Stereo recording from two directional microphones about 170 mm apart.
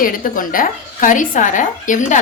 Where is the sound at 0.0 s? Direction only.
55° left (ahead or behind).